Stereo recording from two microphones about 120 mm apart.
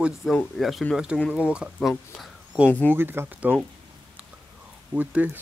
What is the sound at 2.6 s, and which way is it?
Speech, 15° left (ahead or behind).